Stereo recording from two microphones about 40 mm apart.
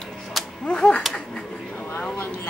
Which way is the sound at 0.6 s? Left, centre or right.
Left.